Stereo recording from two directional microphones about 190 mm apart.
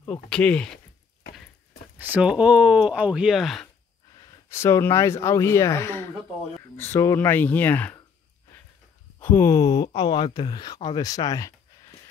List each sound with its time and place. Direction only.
0.0 s speech: 5° left (ahead or behind)
2.0 s speech: 10° right (ahead or behind)
4.2 s speech: 15° left (ahead or behind)
9.2 s speech: 10° left (ahead or behind)